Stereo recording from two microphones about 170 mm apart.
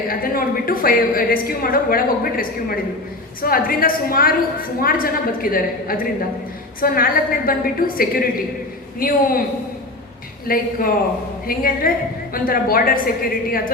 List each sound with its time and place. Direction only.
0.1 s a woman's voice: 60° left (ahead or behind)
10.4 s a woman's voice: 60° left (ahead or behind)